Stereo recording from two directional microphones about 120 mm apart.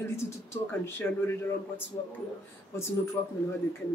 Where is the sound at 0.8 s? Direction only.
20° left (ahead or behind).